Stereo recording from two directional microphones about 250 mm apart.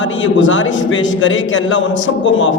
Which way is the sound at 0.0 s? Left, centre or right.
Left.